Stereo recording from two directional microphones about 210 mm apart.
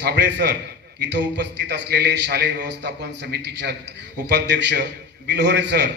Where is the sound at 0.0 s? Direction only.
55° right (ahead or behind).